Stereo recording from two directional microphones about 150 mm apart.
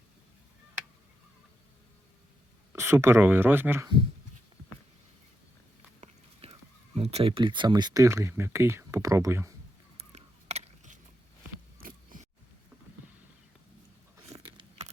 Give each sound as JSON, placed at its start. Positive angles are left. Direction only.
{"t": 2.7, "sound": "speech", "side_deg": -15}
{"t": 6.5, "sound": "speech", "side_deg": -45}
{"t": 10.0, "sound": "a sound", "side_deg": -45}
{"t": 11.8, "sound": "scrape", "side_deg": -60}
{"t": 14.3, "sound": "biting", "side_deg": -25}